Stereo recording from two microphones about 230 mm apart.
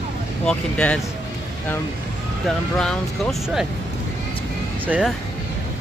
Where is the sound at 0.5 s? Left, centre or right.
Centre.